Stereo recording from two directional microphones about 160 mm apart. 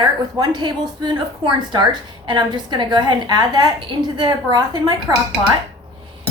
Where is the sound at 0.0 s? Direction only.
25° right (ahead or behind).